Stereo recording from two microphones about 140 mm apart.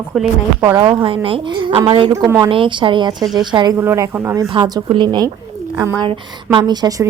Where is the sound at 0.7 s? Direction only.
40° right (ahead or behind).